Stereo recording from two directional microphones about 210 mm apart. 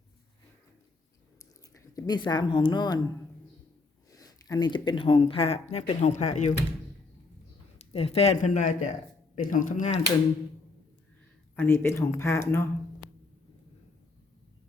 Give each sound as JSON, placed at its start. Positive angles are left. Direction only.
{"t": 1.7, "sound": "speech", "side_deg": 15}
{"t": 4.1, "sound": "speech", "side_deg": 15}
{"t": 7.8, "sound": "speech", "side_deg": 30}
{"t": 11.5, "sound": "speech", "side_deg": 10}